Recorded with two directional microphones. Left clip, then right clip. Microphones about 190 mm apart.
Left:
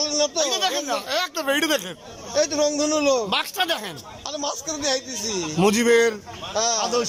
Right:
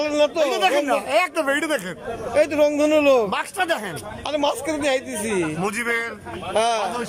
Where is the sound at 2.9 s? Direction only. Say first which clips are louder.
Right 4 dB; 5° right (ahead or behind).